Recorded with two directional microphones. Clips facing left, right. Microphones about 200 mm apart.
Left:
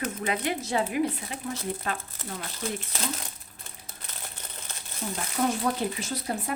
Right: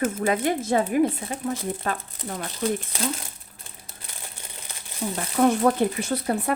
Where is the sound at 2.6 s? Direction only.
55° right (ahead or behind).